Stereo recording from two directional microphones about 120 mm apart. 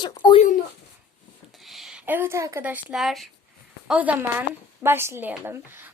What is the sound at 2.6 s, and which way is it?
Speech, 15° right (ahead or behind).